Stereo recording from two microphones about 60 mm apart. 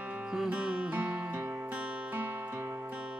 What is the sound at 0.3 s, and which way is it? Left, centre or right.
Music, centre.